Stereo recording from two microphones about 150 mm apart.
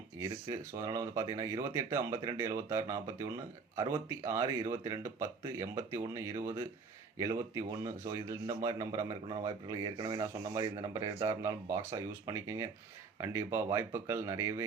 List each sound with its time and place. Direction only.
0.2 s speech: 20° right (ahead or behind)